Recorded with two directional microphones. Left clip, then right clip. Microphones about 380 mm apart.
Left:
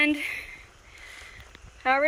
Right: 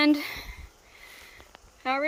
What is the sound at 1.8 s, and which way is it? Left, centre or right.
Speech, centre.